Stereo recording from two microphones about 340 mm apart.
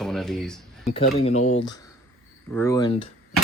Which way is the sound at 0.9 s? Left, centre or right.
Centre.